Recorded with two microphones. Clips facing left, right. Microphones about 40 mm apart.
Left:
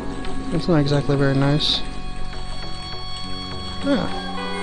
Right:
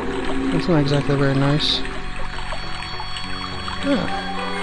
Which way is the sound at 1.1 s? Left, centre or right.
Right.